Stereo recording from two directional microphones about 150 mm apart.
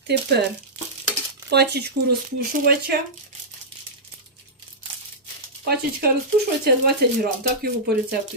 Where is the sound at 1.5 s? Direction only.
90° right.